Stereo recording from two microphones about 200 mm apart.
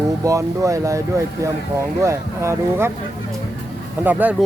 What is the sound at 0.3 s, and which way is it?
Speech, 15° right (ahead or behind).